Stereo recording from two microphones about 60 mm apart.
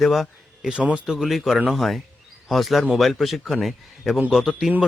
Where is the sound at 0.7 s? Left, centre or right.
Centre.